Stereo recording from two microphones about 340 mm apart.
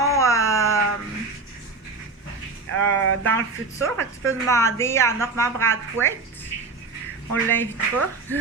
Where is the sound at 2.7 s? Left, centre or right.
Right.